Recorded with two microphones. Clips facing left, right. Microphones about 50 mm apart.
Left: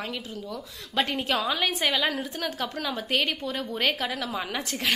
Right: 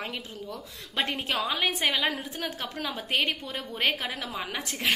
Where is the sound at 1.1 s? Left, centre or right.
Centre.